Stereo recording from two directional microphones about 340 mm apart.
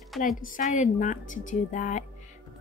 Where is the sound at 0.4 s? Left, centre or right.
Left.